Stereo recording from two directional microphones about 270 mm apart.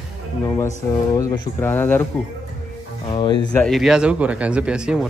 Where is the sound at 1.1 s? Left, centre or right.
Centre.